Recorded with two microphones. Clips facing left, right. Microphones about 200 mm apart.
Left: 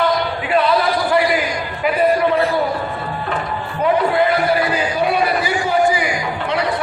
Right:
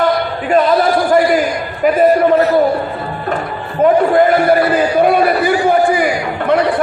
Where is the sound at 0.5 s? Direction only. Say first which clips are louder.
Right 5 dB; 45° right (ahead or behind).